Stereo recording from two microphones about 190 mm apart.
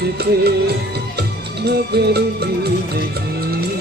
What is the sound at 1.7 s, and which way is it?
Music, 60° right (ahead or behind).